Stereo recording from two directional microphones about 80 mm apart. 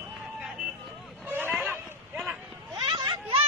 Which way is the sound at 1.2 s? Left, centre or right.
Right.